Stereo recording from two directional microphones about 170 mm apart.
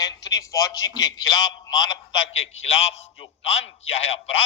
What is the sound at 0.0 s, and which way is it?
A man's voice, 20° left (ahead or behind).